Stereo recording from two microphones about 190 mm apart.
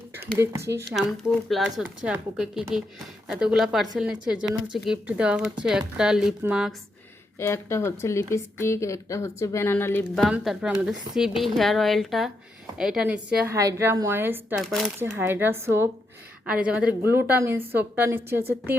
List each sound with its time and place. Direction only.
0.3 s a woman's voice: 15° right (ahead or behind)
1.5 s a woman's voice: centre (ahead or behind)
7.3 s speech: 15° left (ahead or behind)
10.2 s a woman's voice: centre (ahead or behind)
14.6 s a woman's voice: centre (ahead or behind)
14.9 s a woman's voice: 10° right (ahead or behind)